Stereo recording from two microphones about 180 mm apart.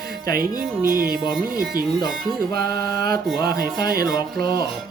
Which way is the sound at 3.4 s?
55° right (ahead or behind).